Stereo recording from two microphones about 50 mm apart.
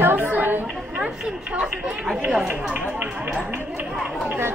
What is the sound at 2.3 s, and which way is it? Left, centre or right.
Speech, centre.